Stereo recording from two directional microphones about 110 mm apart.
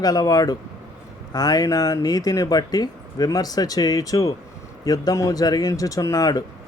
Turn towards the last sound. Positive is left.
turn(degrees=35)  # may be behind; listen again after turning